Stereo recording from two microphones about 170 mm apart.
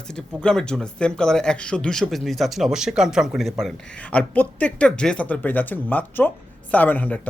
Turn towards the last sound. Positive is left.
turn(degrees=10)  # may be behind; listen again after turning